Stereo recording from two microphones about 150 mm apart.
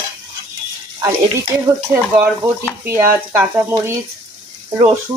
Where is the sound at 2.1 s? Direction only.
10° right (ahead or behind).